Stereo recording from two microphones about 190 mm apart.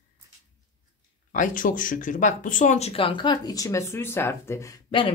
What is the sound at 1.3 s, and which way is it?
Speech, 45° left (ahead or behind).